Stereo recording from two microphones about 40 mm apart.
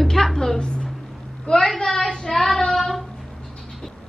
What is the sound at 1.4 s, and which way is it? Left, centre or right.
Speech, left.